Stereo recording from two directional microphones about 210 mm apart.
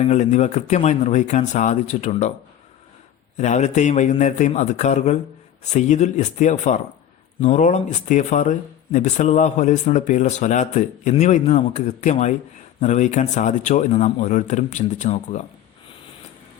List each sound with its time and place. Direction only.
0.0 s speech: 35° left (ahead or behind)
3.3 s speech: 35° left (ahead or behind)